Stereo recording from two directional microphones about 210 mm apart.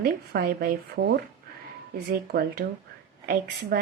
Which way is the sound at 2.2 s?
50° right (ahead or behind).